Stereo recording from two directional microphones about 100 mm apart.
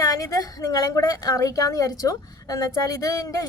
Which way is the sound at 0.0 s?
35° left (ahead or behind).